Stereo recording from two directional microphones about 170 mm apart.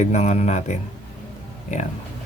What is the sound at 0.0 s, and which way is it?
Speech, 40° left (ahead or behind).